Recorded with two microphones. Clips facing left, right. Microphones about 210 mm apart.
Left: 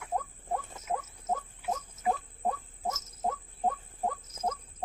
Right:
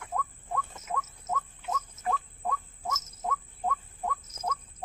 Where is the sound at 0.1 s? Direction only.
30° left (ahead or behind).